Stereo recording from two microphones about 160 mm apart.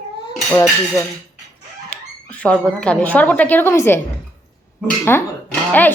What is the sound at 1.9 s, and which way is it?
Speech, 10° left (ahead or behind).